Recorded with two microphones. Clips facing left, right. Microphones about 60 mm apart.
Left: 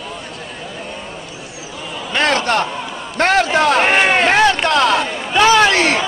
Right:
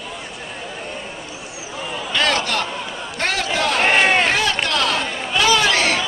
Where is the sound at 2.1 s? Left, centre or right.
Left.